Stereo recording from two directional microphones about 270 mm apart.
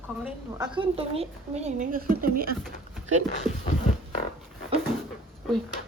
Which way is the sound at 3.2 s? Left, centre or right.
Left.